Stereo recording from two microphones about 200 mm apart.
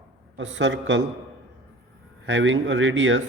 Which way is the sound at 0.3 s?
65° right (ahead or behind).